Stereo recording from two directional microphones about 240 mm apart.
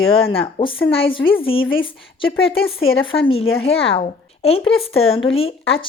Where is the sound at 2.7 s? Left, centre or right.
Left.